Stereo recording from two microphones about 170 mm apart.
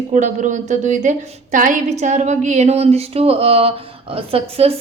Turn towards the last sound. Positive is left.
turn(degrees=-35)  # may be behind; listen again after turning